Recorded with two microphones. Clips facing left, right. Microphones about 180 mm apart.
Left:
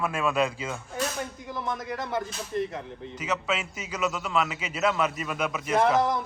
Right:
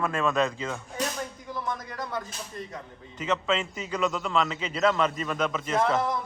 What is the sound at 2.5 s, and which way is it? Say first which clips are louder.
Speech: left 11 dB; 25° left (ahead or behind).